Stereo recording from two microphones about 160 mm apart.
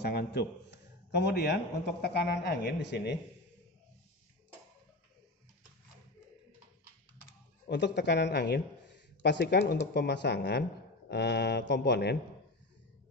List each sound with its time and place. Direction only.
0.0 s a man's voice: 85° left
7.6 s a man's voice: 90° left